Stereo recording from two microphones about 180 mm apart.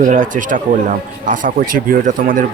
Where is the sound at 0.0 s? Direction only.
45° right (ahead or behind).